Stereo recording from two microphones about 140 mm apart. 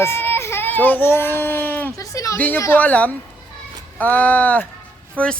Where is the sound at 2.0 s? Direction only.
20° left (ahead or behind).